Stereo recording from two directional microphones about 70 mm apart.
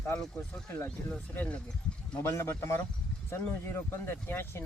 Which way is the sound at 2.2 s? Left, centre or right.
Left.